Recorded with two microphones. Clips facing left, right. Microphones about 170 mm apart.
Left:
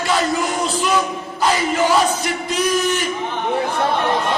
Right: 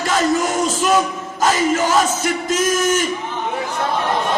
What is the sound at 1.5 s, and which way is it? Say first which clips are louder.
Speech: even; 45° right (ahead or behind).